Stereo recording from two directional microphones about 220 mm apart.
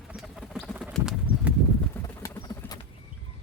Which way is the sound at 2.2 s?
15° left (ahead or behind).